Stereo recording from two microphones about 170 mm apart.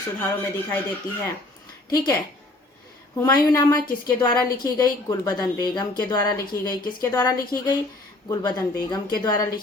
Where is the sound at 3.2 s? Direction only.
20° left (ahead or behind).